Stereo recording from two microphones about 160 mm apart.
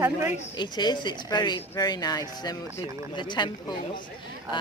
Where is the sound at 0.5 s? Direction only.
25° left (ahead or behind).